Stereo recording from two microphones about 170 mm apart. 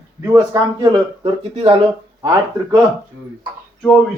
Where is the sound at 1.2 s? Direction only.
30° right (ahead or behind).